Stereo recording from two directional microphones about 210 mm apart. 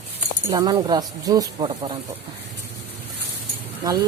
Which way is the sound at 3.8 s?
15° right (ahead or behind).